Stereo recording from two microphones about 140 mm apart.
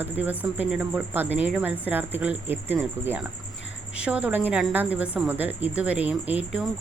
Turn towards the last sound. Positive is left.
turn(degrees=-10)  # may be behind; listen again after turning